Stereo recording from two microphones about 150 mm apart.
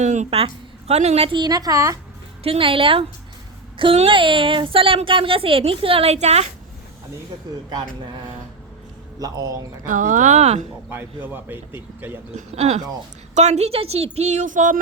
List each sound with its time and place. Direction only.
0.0 s a woman's voice: 50° right (ahead or behind); by 2.0 s 20° right (ahead or behind)
2.4 s a woman's voice: 40° right (ahead or behind)
7.5 s a man's voice: 30° right (ahead or behind)
9.1 s a man's voice: 25° right (ahead or behind)
9.8 s speech: 60° right (ahead or behind)
10.8 s a man's voice: 15° right (ahead or behind)
12.5 s speech: 45° right (ahead or behind)